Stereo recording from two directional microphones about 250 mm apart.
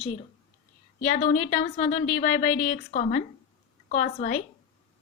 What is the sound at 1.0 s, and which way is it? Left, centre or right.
A woman's voice, left.